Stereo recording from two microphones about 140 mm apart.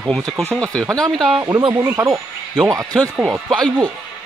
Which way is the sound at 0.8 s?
25° right (ahead or behind).